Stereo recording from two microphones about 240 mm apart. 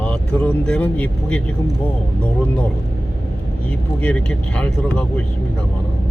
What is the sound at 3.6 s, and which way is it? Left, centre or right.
Speech, centre.